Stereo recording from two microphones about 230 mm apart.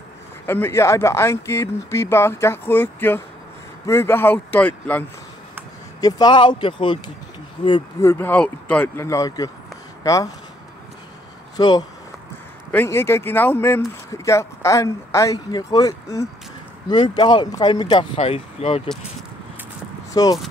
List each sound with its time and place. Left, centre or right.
0.5 s speech: centre
11.5 s speech: centre
20.1 s a sound: centre